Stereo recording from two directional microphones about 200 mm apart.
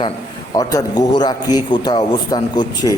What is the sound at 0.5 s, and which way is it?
A man's voice, 15° left (ahead or behind).